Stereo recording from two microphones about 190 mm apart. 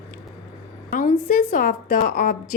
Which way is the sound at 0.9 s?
45° left (ahead or behind).